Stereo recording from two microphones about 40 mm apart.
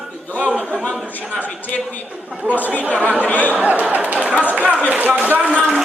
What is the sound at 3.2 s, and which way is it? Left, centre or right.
Speech, left.